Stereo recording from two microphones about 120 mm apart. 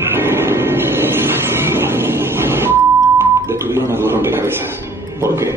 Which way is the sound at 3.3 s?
20° right (ahead or behind).